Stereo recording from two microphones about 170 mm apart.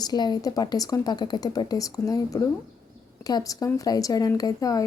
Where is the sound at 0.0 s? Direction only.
25° left (ahead or behind).